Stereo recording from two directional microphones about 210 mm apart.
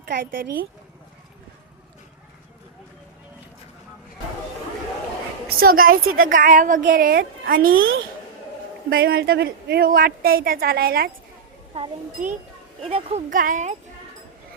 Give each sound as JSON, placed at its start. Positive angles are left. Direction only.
{"t": 0.0, "sound": "a woman's voice", "side_deg": -40}
{"t": 5.5, "sound": "a woman's voice", "side_deg": -45}
{"t": 7.7, "sound": "a woman's voice", "side_deg": -70}
{"t": 8.9, "sound": "a woman's voice", "side_deg": -45}
{"t": 11.7, "sound": "speech", "side_deg": -30}